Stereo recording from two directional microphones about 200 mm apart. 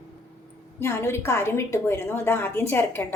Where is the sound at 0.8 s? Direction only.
15° left (ahead or behind).